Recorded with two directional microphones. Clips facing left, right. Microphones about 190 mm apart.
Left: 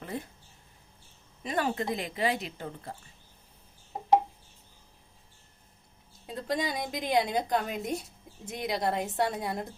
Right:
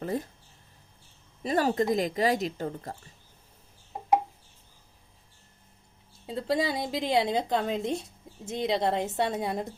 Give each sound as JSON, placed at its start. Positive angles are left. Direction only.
{"t": 0.0, "sound": "speech", "side_deg": -40}
{"t": 1.5, "sound": "a woman's voice", "side_deg": -40}
{"t": 6.2, "sound": "a woman's voice", "side_deg": -25}